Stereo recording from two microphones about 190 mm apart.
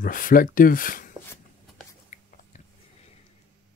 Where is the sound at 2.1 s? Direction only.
35° left (ahead or behind).